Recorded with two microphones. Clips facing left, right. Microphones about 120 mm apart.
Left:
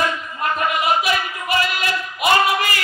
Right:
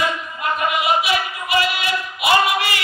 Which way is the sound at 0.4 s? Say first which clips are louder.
Even; 40° left (ahead or behind).